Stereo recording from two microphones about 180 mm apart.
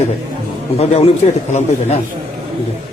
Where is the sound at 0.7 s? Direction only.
35° left (ahead or behind).